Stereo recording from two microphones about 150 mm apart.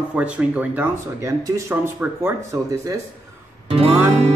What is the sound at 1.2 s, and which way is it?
Speech, 20° right (ahead or behind).